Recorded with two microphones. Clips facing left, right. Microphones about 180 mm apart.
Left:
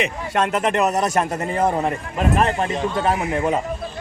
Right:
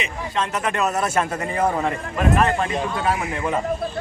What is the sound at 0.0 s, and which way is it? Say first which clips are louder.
Speech: left 4 dB; 65° left (ahead or behind).